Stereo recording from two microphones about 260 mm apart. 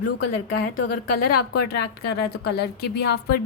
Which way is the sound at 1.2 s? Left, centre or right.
Left.